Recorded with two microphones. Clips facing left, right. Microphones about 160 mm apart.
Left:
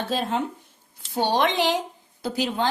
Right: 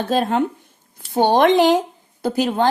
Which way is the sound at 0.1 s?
55° right (ahead or behind).